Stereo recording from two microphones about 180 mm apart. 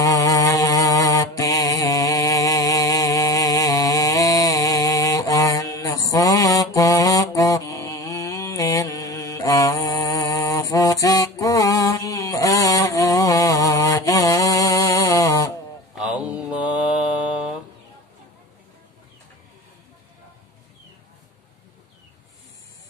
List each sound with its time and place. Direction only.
0.0 s mantra: 20° left (ahead or behind)
15.9 s mantra: 5° right (ahead or behind)